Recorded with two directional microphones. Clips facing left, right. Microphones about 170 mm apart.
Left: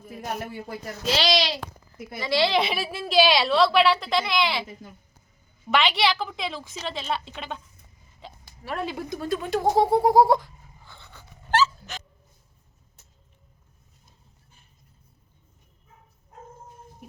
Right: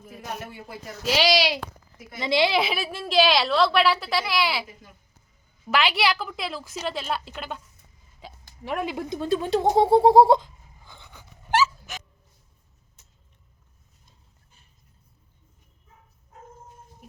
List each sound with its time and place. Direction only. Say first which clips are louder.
1.0 s speech: right 2 dB; 10° right (ahead or behind)
2.6 s a woman's voice: even; centre (ahead or behind)
5.7 s a woman's voice: left 1 dB; 5° right (ahead or behind)
8.2 s a sound: even; 10° right (ahead or behind)
8.6 s a woman's voice: right 2 dB; 15° right (ahead or behind)
9.6 s a sound: right 3 dB; 25° right (ahead or behind)